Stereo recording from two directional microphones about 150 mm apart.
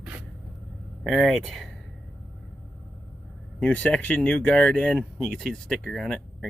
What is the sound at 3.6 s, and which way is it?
Speech, 10° left (ahead or behind).